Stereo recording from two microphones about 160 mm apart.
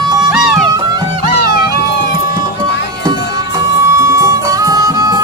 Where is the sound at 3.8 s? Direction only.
20° right (ahead or behind).